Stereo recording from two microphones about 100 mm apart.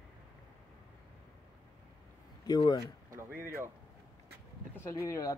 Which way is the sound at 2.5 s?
45° left (ahead or behind).